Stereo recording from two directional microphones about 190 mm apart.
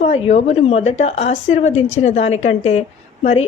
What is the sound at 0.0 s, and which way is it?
A woman's voice, 35° left (ahead or behind).